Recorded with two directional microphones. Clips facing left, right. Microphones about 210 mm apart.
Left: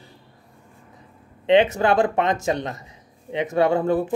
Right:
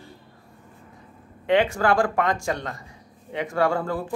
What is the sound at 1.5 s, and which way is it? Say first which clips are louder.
A man's voice: left 3 dB; 20° left (ahead or behind).